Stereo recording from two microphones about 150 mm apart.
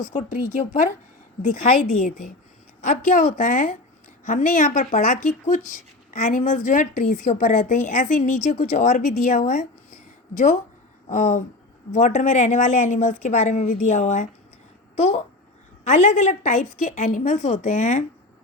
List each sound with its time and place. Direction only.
0.0 s a woman's voice: 55° left (ahead or behind)
1.9 s a woman's voice: 50° left (ahead or behind)